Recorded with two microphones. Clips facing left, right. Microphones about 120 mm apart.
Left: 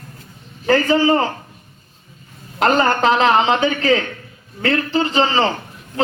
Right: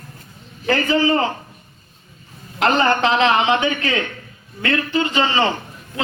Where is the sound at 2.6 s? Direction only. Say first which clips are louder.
Left 1 dB; 40° left (ahead or behind).